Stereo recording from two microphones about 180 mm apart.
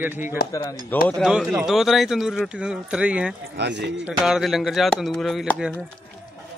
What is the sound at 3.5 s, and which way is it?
Speech, 75° right (ahead or behind).